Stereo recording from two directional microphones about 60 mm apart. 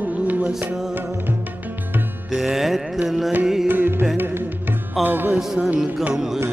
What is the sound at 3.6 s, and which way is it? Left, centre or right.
Music, right.